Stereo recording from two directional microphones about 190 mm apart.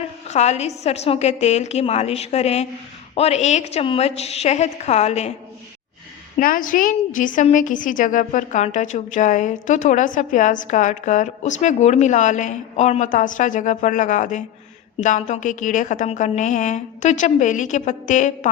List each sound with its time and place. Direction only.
0.3 s a woman's voice: 35° left (ahead or behind)
6.3 s a woman's voice: 45° left (ahead or behind)